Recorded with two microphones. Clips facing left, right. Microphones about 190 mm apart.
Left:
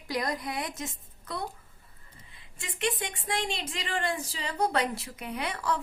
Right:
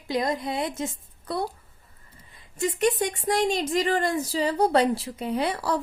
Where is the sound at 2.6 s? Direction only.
40° right (ahead or behind).